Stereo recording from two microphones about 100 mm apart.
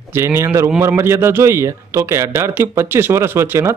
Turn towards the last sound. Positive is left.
turn(degrees=-25)  # may be behind; listen again after turning